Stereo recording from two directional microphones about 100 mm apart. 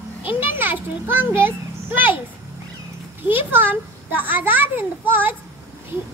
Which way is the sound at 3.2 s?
20° right (ahead or behind).